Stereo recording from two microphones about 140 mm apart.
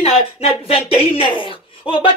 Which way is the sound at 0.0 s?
40° left (ahead or behind).